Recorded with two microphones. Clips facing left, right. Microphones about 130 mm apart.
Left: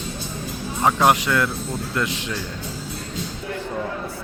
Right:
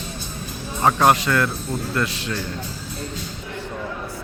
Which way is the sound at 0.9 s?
10° left (ahead or behind).